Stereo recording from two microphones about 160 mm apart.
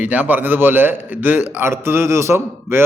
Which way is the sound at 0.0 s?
10° right (ahead or behind).